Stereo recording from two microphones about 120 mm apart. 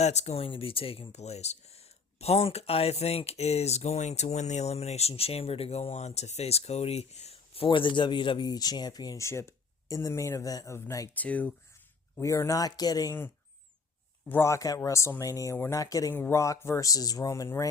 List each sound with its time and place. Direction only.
0.0 s speech: 65° left (ahead or behind); by 11.1 s 25° left (ahead or behind)
11.1 s speech: 15° left (ahead or behind)
12.2 s speech: 25° left (ahead or behind)
14.3 s speech: 20° left (ahead or behind)